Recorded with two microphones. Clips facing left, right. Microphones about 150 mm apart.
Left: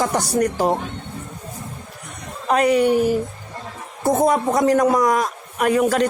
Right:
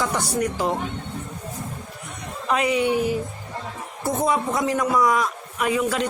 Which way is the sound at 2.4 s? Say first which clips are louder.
Left 5 dB; 45° left (ahead or behind).